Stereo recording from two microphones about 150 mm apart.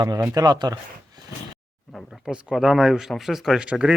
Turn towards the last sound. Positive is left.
turn(degrees=-5)  # may be behind; listen again after turning